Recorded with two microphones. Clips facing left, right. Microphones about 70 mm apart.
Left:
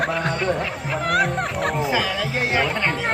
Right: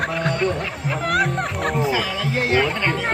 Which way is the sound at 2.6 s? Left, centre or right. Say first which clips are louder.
Right 1 dB; centre.